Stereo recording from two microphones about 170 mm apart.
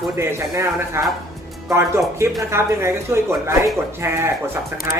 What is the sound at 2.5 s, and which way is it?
Speech, 15° right (ahead or behind).